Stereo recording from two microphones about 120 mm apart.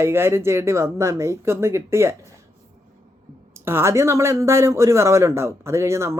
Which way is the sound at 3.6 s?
20° right (ahead or behind).